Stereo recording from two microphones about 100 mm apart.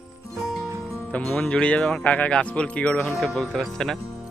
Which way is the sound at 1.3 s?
10° left (ahead or behind).